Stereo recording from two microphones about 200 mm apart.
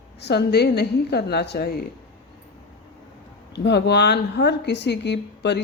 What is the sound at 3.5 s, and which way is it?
Speech, 60° left (ahead or behind).